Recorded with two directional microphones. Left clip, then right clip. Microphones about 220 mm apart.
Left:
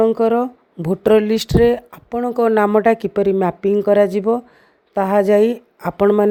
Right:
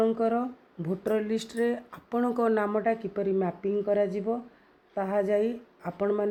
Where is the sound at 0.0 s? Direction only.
40° left (ahead or behind).